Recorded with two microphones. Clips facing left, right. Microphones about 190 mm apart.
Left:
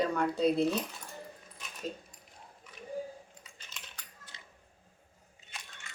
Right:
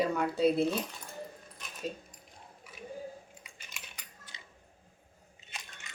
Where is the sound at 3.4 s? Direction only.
10° right (ahead or behind).